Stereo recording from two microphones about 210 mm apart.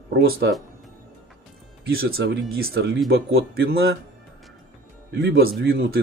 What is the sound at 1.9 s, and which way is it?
Speech, 45° right (ahead or behind).